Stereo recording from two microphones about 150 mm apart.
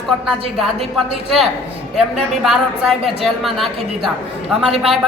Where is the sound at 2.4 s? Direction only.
Centre (ahead or behind).